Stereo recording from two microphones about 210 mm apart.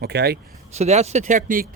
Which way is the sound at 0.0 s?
50° right (ahead or behind).